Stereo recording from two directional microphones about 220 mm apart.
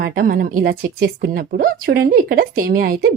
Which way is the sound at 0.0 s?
40° right (ahead or behind).